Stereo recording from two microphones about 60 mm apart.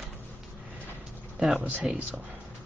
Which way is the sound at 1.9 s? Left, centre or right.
Centre.